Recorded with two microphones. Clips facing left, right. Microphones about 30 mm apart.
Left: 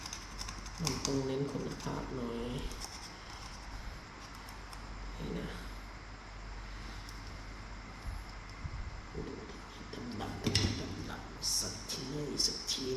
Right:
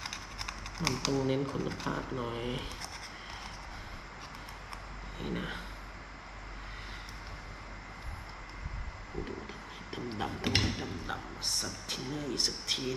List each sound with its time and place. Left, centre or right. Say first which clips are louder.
0.0 s typing: right 5 dB; right
1.5 s speech: right 4 dB; right
5.2 s vehicle: right 4 dB; right
9.9 s a sound: right 5 dB; right
11.4 s a sound: right 3 dB; right
12.2 s a man's voice: right 1 dB; right